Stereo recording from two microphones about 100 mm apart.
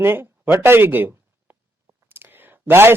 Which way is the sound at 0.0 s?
20° right (ahead or behind).